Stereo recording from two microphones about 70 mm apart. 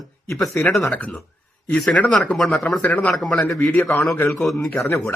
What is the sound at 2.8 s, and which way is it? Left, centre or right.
Speech, left.